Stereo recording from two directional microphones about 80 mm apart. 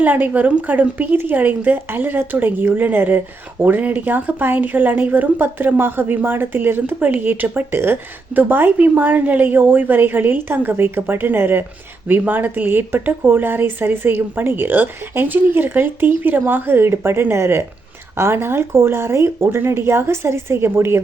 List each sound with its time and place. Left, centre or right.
0.0 s a woman's voice: right